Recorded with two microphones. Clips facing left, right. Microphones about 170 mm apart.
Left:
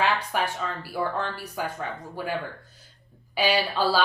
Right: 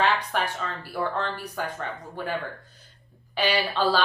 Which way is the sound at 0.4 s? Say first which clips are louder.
Left 1 dB; 10° left (ahead or behind).